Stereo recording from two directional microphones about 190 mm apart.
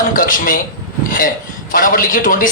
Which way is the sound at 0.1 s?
45° left (ahead or behind).